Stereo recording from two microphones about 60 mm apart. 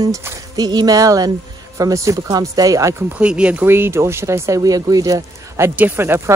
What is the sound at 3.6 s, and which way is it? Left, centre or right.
Speech, right.